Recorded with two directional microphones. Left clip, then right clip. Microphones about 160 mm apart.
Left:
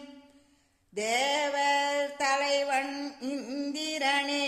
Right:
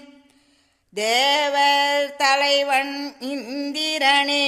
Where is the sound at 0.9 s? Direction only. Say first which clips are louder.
Right 9 dB; 25° right (ahead or behind).